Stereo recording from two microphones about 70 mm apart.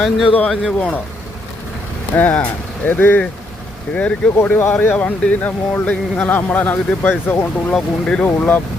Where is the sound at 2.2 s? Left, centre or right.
Left.